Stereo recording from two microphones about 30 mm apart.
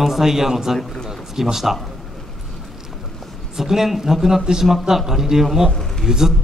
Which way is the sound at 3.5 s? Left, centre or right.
Centre.